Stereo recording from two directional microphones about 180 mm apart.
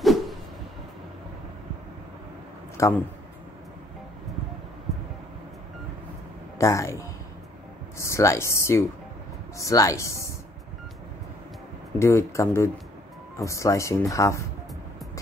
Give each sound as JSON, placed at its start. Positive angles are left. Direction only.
{"t": 0.0, "sound": "a sound", "side_deg": 0}
{"t": 2.8, "sound": "speech", "side_deg": 15}
{"t": 6.6, "sound": "speech", "side_deg": 15}
{"t": 8.0, "sound": "speech", "side_deg": 15}
{"t": 12.0, "sound": "speech", "side_deg": 15}